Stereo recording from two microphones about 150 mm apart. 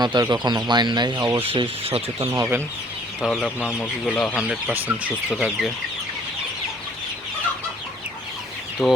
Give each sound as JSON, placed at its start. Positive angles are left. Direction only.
{"t": 0.0, "sound": "speech", "side_deg": -30}
{"t": 1.4, "sound": "speech", "side_deg": -40}
{"t": 2.1, "sound": "speech", "side_deg": -20}
{"t": 3.2, "sound": "speech", "side_deg": 5}
{"t": 4.4, "sound": "speech", "side_deg": -5}
{"t": 8.8, "sound": "speech", "side_deg": -5}